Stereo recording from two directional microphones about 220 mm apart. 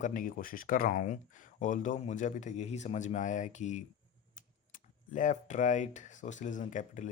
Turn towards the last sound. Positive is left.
turn(degrees=35)  # may be behind; listen again after turning